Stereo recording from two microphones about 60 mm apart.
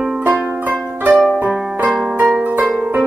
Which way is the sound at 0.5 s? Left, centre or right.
Right.